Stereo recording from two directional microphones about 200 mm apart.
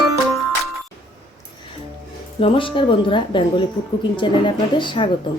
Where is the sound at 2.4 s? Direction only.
25° left (ahead or behind).